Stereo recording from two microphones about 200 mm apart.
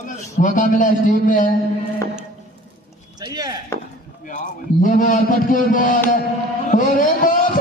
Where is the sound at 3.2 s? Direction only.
20° right (ahead or behind).